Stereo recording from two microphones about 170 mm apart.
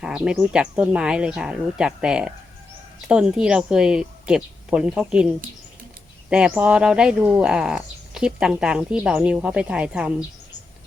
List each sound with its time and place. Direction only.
0.0 s speech: 5° right (ahead or behind)
6.3 s speech: 5° right (ahead or behind)